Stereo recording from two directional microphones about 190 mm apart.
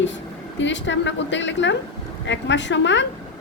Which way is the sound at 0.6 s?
70° left (ahead or behind).